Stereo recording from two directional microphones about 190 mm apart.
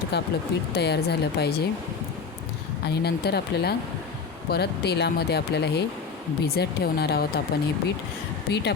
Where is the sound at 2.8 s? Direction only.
60° left (ahead or behind).